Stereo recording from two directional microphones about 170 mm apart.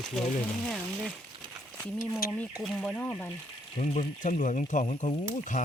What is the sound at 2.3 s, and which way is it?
Speech, 5° left (ahead or behind).